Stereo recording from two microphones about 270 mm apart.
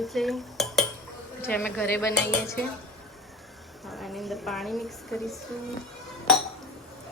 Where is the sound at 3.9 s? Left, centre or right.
Centre.